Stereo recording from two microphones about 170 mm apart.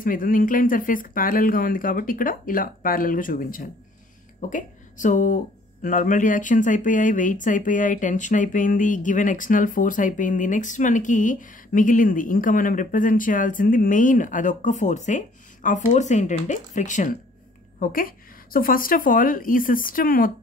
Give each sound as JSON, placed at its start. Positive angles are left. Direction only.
{"t": 0.0, "sound": "speech", "side_deg": 55}